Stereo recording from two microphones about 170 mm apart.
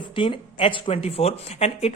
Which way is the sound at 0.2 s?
30° left (ahead or behind).